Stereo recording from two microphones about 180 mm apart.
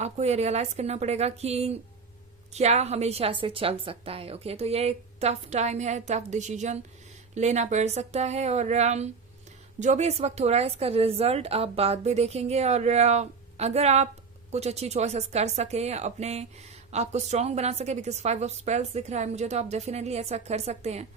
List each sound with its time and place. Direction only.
0.0 s a woman's voice: 35° right (ahead or behind)